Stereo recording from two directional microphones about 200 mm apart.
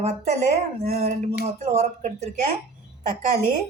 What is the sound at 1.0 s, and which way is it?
Speech, 35° right (ahead or behind).